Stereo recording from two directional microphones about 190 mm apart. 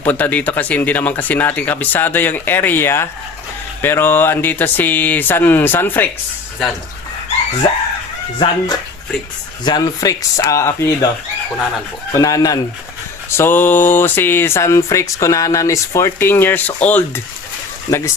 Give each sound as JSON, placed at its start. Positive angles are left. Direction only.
{"t": 0.0, "sound": "speech", "side_deg": 10}
{"t": 8.4, "sound": "speech", "side_deg": 20}
{"t": 12.1, "sound": "speech", "side_deg": 20}